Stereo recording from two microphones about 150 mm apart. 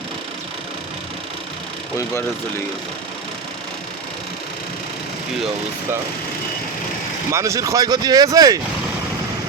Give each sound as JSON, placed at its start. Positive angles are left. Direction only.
{"t": 7.3, "sound": "speech", "side_deg": -20}